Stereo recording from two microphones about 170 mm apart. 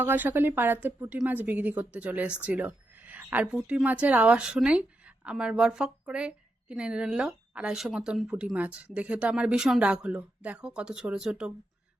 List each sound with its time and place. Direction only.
0.0 s a woman's voice: 10° right (ahead or behind)